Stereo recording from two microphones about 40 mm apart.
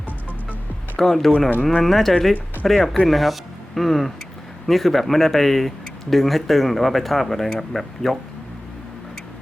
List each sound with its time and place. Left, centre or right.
0.9 s speech: centre